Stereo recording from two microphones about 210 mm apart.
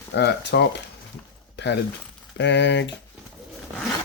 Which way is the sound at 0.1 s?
50° left (ahead or behind).